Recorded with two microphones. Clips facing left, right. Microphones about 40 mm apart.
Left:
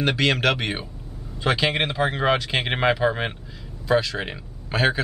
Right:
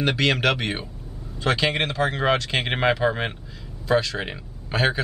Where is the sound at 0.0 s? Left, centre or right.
Centre.